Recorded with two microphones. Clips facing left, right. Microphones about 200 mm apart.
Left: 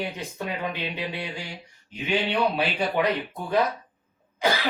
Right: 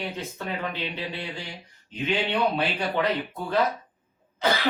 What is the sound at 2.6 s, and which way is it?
Speech, 10° left (ahead or behind).